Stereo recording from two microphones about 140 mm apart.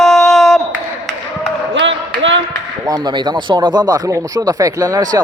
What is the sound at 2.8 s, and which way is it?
Speech, 30° right (ahead or behind).